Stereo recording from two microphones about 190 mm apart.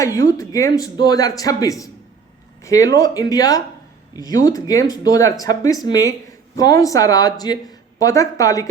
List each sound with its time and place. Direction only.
0.0 s speech: 15° left (ahead or behind)